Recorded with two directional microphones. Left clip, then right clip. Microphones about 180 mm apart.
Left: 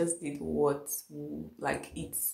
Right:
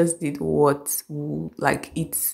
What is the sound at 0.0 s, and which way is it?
A woman's voice, 35° right (ahead or behind).